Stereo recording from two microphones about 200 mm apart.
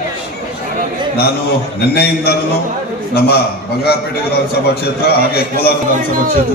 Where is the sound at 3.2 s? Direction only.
55° left (ahead or behind).